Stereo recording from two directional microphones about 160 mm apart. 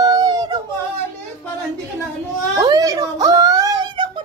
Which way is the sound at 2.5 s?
20° right (ahead or behind).